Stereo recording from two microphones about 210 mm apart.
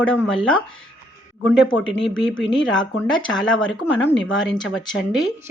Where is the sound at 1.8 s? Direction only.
60° left (ahead or behind).